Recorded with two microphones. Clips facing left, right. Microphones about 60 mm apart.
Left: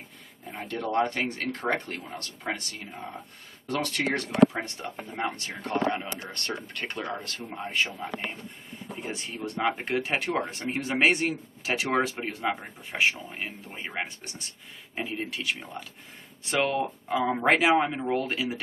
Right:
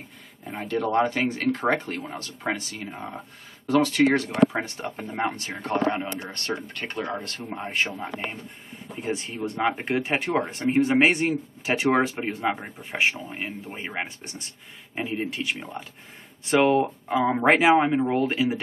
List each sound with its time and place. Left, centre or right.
0.5 s speech: centre
2.9 s speech: centre
3.6 s speech: centre
4.8 s speech: right
5.3 s speech: centre
7.5 s speech: centre